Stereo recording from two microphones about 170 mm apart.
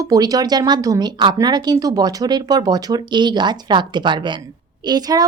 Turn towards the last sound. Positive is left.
turn(degrees=-20)  # may be behind; listen again after turning